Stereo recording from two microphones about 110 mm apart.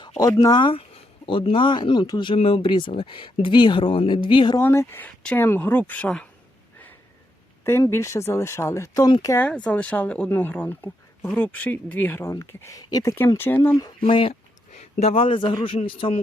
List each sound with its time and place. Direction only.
0.2 s speech: 35° left (ahead or behind)
0.7 s speech: 55° left (ahead or behind)
4.6 s speech: 25° left (ahead or behind)
7.6 s speech: 25° left (ahead or behind)
9.4 s speech: 10° left (ahead or behind); by 13.1 s 35° left (ahead or behind)
13.1 s speech: 20° left (ahead or behind)
14.1 s speech: 50° left (ahead or behind)
14.7 s a man's voice: 90° left; by 16.2 s 55° left (ahead or behind)